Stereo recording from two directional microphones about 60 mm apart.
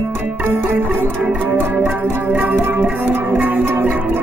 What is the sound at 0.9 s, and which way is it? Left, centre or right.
Music, right.